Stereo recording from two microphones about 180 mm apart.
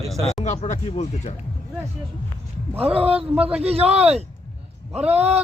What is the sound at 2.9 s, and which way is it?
Speech, 35° right (ahead or behind).